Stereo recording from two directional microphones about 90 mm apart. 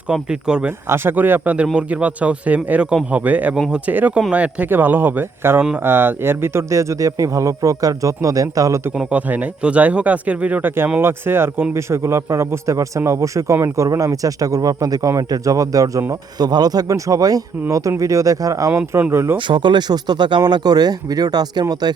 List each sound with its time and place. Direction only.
0.1 s speech: 10° right (ahead or behind)
0.9 s speech: 25° right (ahead or behind)
9.0 s speech: 15° right (ahead or behind); by 18.7 s 40° right (ahead or behind)
18.7 s speech: 15° right (ahead or behind)
19.1 s speech: 30° right (ahead or behind)
19.5 s speech: 60° right (ahead or behind)